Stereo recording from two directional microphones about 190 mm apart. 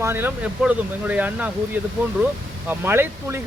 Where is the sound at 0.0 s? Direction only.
10° right (ahead or behind).